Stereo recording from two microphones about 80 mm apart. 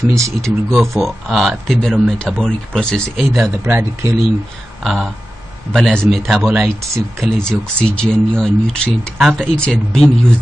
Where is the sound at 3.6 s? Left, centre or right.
Right.